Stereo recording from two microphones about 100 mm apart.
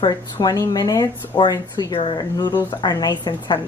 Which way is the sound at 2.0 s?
55° left (ahead or behind).